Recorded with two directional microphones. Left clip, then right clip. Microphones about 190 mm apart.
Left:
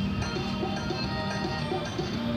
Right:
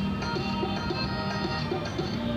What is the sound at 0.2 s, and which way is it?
Music, 25° left (ahead or behind).